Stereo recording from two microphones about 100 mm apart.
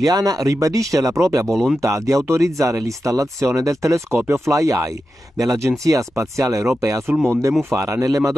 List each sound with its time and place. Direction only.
0.0 s speech: 40° right (ahead or behind)